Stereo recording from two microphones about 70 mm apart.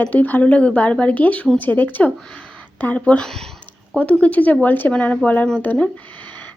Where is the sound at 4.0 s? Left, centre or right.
Centre.